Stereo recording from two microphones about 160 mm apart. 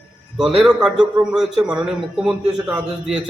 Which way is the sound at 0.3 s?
5° right (ahead or behind).